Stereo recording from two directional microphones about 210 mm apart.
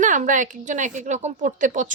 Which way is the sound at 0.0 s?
35° right (ahead or behind).